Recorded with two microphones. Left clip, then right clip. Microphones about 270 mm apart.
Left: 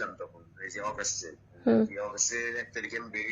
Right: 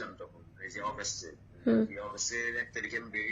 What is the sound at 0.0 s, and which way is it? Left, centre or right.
A man's voice, centre.